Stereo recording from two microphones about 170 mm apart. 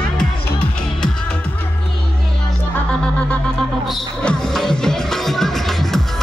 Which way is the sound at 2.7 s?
5° left (ahead or behind).